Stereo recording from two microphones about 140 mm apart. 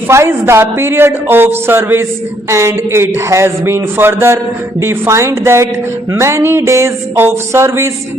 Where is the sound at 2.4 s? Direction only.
20° right (ahead or behind).